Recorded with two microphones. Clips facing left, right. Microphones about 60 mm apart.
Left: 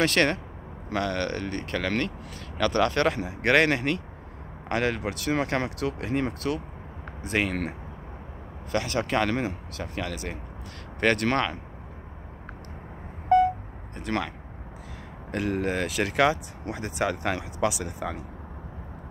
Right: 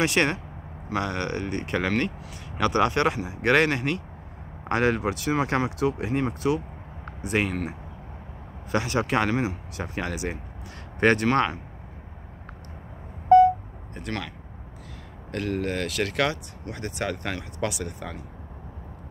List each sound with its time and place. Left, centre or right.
0.0 s speech: centre
8.7 s speech: right
14.1 s speech: centre
15.3 s speech: centre